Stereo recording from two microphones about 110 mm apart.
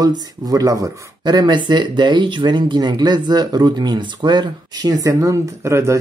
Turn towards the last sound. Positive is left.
turn(degrees=-25)  # may be behind; listen again after turning